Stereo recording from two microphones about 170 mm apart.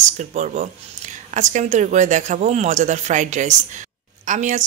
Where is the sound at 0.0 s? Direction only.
45° right (ahead or behind).